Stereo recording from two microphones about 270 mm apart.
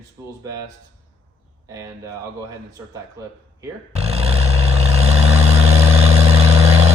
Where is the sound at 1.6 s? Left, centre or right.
Centre.